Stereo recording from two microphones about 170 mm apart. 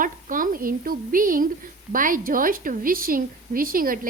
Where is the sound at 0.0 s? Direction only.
55° right (ahead or behind).